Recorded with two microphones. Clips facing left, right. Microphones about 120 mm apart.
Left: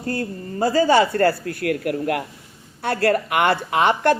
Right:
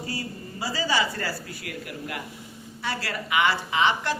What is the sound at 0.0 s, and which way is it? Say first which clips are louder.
A woman's voice: left 8 dB; 55° left (ahead or behind).